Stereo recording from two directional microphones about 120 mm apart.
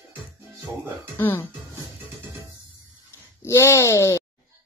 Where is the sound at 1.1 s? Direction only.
20° left (ahead or behind).